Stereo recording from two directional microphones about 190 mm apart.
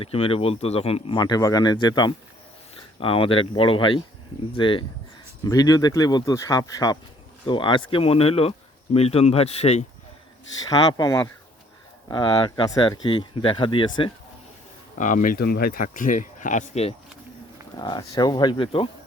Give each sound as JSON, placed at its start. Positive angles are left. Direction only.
{"t": 0.0, "sound": "speech", "side_deg": 30}
{"t": 10.7, "sound": "speech", "side_deg": 20}
{"t": 14.9, "sound": "speech", "side_deg": 45}
{"t": 17.7, "sound": "speech", "side_deg": 20}